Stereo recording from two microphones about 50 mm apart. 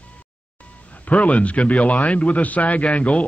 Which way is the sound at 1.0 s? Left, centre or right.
Left.